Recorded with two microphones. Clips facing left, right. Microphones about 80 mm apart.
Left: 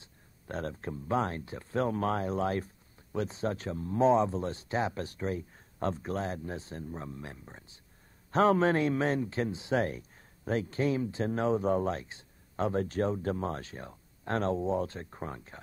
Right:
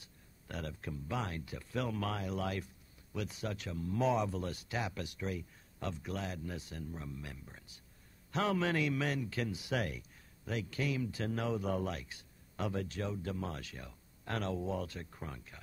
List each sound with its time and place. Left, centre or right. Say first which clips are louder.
0.0 s speech: left 5 dB; left